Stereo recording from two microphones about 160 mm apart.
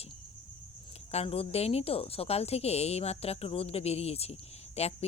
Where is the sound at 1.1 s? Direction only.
40° left (ahead or behind).